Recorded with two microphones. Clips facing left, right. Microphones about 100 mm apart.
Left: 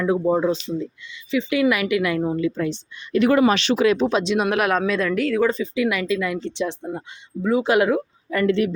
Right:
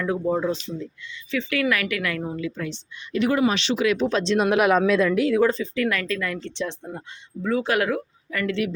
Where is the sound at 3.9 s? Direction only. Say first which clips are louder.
Left 1 dB; 15° left (ahead or behind).